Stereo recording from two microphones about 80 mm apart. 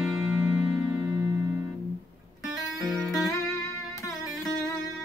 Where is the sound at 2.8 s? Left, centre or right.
Centre.